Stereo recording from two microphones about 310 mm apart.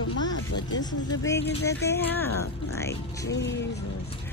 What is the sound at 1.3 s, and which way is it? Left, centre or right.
Speech, left.